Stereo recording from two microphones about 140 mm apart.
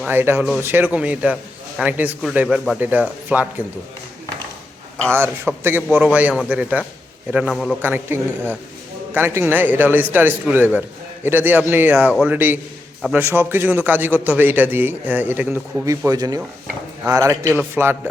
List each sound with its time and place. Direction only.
0.1 s a man's voice: 15° right (ahead or behind)
5.1 s a man's voice: 15° right (ahead or behind); by 7.8 s centre (ahead or behind)
7.8 s a man's voice: 15° right (ahead or behind)